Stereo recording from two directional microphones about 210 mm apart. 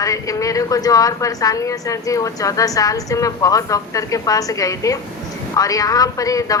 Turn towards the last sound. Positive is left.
turn(degrees=15)  # may be behind; listen again after turning